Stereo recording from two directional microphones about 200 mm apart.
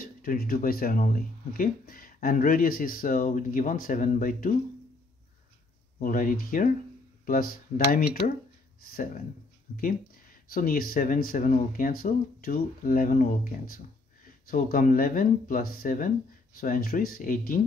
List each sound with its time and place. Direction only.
0.0 s speech: 45° left (ahead or behind)
5.9 s speech: 45° left (ahead or behind)
10.5 s speech: 45° left (ahead or behind)